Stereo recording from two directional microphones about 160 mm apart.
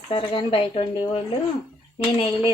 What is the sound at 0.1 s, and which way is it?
Speech, 35° left (ahead or behind).